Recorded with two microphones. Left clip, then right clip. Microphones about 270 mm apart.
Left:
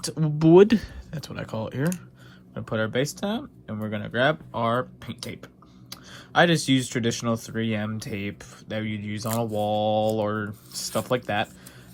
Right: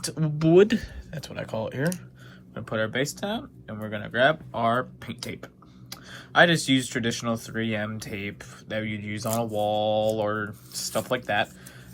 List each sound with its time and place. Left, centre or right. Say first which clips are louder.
0.0 s speech: left 3 dB; centre